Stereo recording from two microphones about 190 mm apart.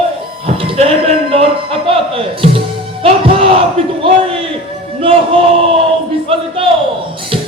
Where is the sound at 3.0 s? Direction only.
30° right (ahead or behind).